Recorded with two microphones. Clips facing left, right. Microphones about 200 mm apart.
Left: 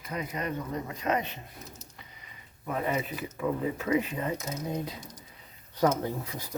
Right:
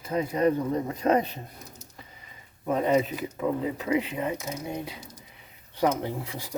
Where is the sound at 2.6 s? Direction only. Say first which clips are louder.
Right 7 dB; 25° right (ahead or behind).